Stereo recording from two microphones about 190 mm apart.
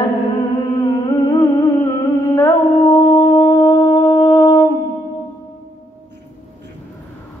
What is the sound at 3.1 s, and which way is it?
Wind instrument, 15° left (ahead or behind).